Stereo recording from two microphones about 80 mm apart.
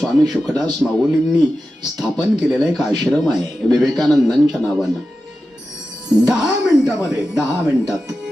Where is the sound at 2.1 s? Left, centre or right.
Centre.